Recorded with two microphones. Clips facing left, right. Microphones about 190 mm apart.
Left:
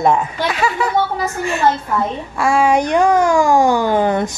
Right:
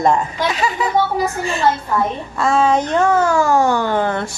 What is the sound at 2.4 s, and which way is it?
A child's voice, 10° left (ahead or behind).